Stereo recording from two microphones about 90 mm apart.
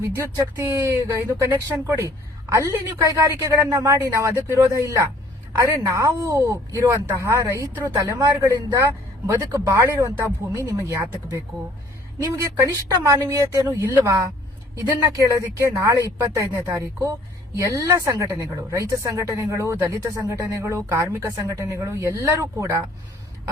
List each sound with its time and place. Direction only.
0.5 s a woman's voice: 30° right (ahead or behind)
7.9 s speech: 45° right (ahead or behind)
8.8 s a woman's voice: 35° right (ahead or behind)
12.2 s a woman's voice: 30° right (ahead or behind)